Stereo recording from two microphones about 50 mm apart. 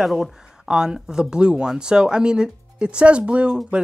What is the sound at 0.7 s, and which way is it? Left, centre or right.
Speech, centre.